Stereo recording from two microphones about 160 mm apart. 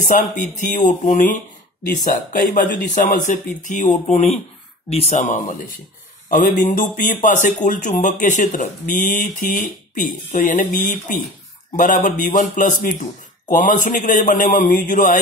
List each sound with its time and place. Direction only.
0.0 s speech: 50° left (ahead or behind)
2.3 s speech: 55° left (ahead or behind)